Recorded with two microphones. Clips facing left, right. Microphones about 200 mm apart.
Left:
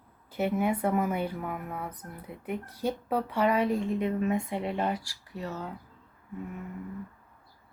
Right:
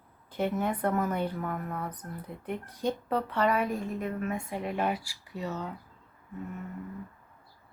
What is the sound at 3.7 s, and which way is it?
Speech, 20° left (ahead or behind).